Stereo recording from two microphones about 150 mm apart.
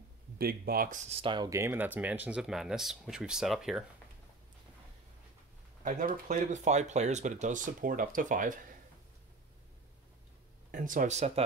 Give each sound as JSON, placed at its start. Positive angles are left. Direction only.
{"t": 0.4, "sound": "speech", "side_deg": -90}
{"t": 1.1, "sound": "speech", "side_deg": -30}
{"t": 1.5, "sound": "speech", "side_deg": -15}
{"t": 5.9, "sound": "speech", "side_deg": -60}
{"t": 10.7, "sound": "speech", "side_deg": -60}